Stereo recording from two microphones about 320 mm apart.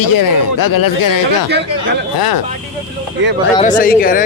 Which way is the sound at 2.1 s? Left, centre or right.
Left.